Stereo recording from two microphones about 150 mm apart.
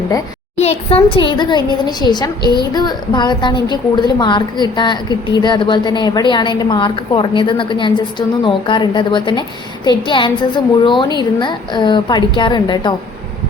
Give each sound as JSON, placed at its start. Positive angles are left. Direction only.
{"t": 0.5, "sound": "a woman's voice", "side_deg": 45}